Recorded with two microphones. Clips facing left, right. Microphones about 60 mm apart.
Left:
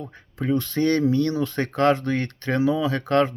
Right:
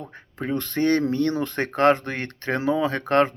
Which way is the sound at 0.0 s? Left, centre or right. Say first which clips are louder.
Left 2 dB; right.